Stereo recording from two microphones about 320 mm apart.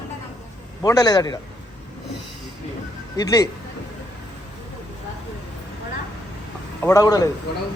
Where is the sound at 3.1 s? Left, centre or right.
Centre.